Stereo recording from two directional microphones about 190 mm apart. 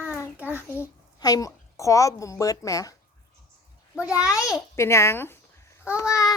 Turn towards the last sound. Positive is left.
turn(degrees=15)  # may be behind; listen again after turning